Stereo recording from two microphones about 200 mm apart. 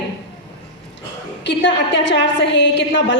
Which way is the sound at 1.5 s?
65° left (ahead or behind).